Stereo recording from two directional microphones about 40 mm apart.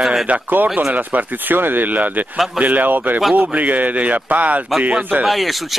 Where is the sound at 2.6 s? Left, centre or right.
Right.